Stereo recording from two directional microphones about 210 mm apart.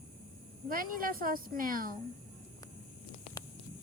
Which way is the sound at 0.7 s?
40° right (ahead or behind).